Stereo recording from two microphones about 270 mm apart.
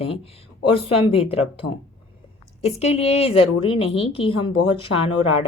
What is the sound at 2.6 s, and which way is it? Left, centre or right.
Speech, left.